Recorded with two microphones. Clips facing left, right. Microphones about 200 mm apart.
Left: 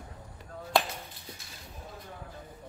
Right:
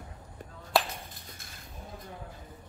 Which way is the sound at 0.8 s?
Centre (ahead or behind).